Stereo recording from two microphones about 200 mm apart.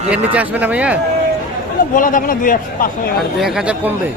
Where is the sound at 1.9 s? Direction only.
45° left (ahead or behind).